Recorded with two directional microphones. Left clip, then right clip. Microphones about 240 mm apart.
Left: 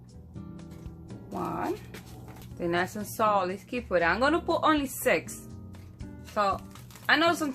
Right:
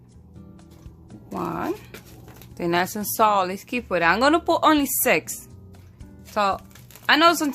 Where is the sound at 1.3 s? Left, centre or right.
Right.